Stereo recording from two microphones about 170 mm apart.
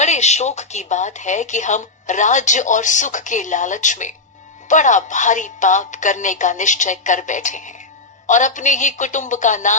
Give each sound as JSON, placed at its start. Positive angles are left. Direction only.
{"t": 0.0, "sound": "speech", "side_deg": 40}